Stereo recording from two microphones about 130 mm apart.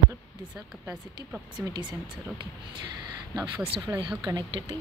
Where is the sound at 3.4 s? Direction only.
40° right (ahead or behind).